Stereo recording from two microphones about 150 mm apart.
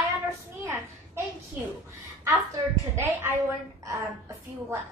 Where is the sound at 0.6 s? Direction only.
20° right (ahead or behind).